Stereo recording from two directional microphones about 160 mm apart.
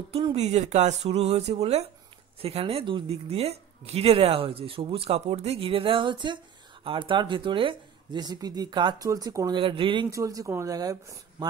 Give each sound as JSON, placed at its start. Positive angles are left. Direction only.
{"t": 0.1, "sound": "speech", "side_deg": -35}
{"t": 9.6, "sound": "speech", "side_deg": -30}
{"t": 10.1, "sound": "speech", "side_deg": -20}